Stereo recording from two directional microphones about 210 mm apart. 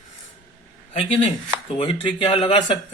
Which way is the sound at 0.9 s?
25° left (ahead or behind).